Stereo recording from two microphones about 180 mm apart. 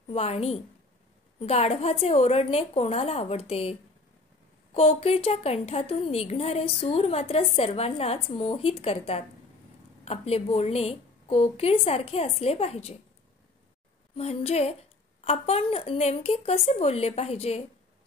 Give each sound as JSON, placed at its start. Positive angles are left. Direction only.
{"t": 0.1, "sound": "a woman's voice", "side_deg": 35}
{"t": 4.7, "sound": "a woman's voice", "side_deg": 35}
{"t": 14.1, "sound": "a woman's voice", "side_deg": 35}